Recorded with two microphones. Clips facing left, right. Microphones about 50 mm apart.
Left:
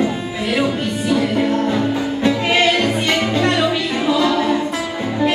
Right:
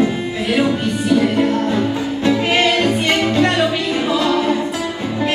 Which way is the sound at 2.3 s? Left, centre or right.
Centre.